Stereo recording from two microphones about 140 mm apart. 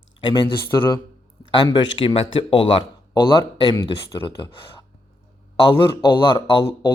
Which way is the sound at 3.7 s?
25° left (ahead or behind).